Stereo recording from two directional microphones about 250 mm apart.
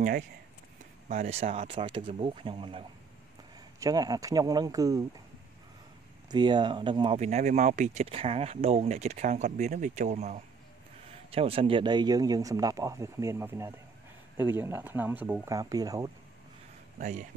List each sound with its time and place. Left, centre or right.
1.0 s speech: right
3.8 s speech: centre
6.3 s speech: centre
17.0 s speech: right